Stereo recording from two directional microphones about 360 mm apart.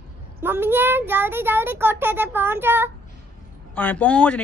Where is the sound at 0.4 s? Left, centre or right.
Centre.